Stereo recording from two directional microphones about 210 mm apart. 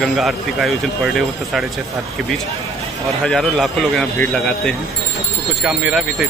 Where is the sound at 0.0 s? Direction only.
Centre (ahead or behind).